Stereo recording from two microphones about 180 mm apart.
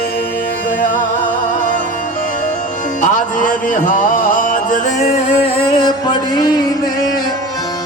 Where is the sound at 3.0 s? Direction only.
45° left (ahead or behind).